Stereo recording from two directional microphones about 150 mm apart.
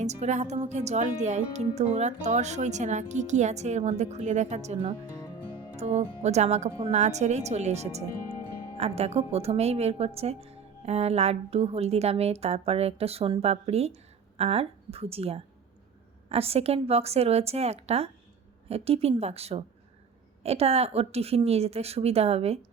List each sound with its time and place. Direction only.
0.0 s a woman's voice: 50° right (ahead or behind)